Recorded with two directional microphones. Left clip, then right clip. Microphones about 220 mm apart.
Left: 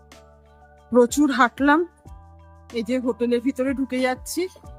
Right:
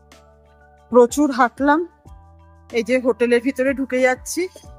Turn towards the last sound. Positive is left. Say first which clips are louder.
# right 3 dB
turn(degrees=0)  # may be behind; listen again after turning